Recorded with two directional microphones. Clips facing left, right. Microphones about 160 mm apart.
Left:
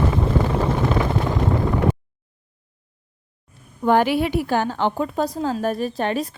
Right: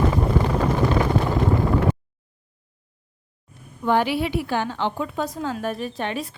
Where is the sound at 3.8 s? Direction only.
50° left (ahead or behind).